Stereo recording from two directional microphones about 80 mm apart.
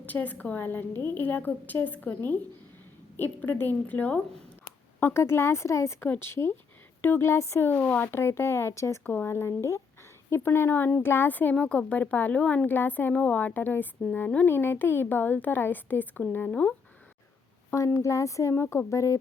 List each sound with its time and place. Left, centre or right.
0.0 s speech: left
4.9 s a woman's voice: left
7.7 s speech: left
9.0 s speech: left
17.7 s a woman's voice: left